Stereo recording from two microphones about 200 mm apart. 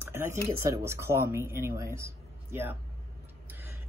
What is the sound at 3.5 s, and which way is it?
Music, 10° right (ahead or behind).